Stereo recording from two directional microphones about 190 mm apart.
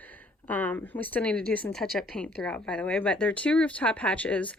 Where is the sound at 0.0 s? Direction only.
10° left (ahead or behind).